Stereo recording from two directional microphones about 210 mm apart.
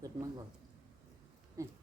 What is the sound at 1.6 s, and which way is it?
Speech, 15° right (ahead or behind).